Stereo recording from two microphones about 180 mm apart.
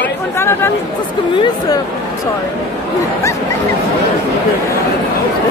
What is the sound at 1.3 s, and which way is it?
Speech, 25° left (ahead or behind).